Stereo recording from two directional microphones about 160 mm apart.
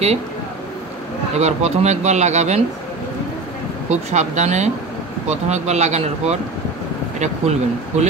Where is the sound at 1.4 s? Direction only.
45° right (ahead or behind).